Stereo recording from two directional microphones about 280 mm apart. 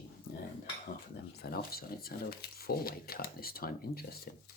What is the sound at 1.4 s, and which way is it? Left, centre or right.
Speech, left.